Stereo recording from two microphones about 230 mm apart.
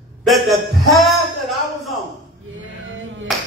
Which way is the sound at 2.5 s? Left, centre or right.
Right.